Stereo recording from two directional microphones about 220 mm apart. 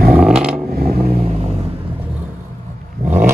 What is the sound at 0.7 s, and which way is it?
Vehicle, 45° right (ahead or behind).